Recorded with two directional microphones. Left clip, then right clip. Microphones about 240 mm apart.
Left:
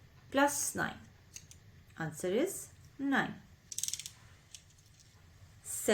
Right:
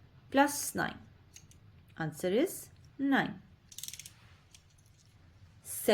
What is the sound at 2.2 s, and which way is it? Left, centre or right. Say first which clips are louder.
Speech: right 2 dB; right.